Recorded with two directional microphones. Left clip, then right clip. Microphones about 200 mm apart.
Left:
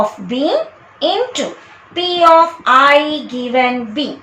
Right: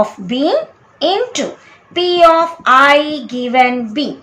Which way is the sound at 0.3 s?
30° right (ahead or behind).